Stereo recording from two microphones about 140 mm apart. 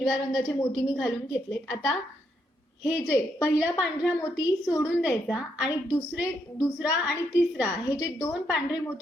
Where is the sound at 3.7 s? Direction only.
5° right (ahead or behind).